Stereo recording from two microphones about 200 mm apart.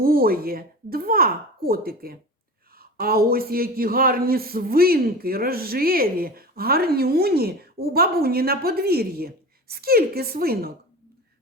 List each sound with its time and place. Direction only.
0.0 s a man's voice: 45° right (ahead or behind)